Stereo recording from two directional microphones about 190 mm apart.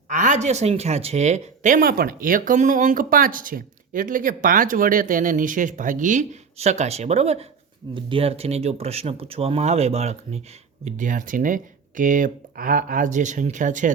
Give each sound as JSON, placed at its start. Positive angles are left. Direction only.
{"t": 0.1, "sound": "speech", "side_deg": -40}